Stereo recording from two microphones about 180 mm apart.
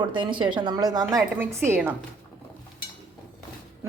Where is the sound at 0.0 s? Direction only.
25° right (ahead or behind).